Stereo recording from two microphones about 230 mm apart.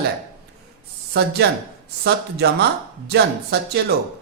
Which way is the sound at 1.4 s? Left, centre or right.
Right.